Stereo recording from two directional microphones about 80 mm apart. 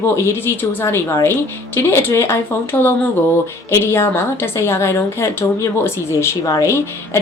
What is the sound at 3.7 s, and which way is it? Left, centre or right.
A woman's voice, left.